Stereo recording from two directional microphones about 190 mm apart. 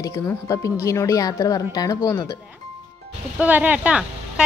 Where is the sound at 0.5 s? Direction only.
15° left (ahead or behind).